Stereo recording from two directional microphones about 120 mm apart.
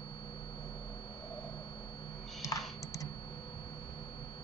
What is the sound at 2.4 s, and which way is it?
Computer keyboard, 25° left (ahead or behind).